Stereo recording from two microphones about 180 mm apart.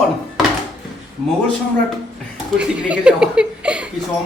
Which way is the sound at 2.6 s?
5° right (ahead or behind).